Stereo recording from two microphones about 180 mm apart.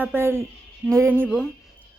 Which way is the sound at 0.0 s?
15° right (ahead or behind).